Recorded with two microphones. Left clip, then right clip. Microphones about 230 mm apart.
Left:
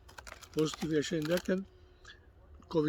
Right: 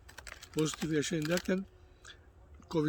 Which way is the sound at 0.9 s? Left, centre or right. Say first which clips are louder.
Left 1 dB; centre.